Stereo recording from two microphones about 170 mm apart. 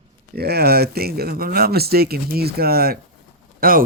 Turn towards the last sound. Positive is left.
turn(degrees=-55)  # may be behind; listen again after turning